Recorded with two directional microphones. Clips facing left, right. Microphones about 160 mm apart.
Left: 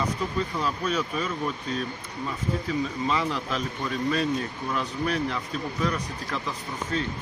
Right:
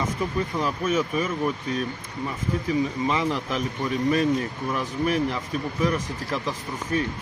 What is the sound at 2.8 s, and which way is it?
Speech, 15° right (ahead or behind).